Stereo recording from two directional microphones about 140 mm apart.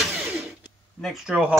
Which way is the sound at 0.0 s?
Centre (ahead or behind).